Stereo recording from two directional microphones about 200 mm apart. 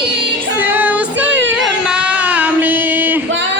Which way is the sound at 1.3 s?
5° right (ahead or behind).